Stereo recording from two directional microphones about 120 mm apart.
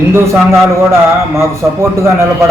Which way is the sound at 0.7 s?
20° right (ahead or behind).